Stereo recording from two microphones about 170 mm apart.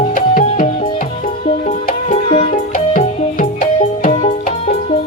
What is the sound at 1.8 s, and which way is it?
Music, 40° left (ahead or behind).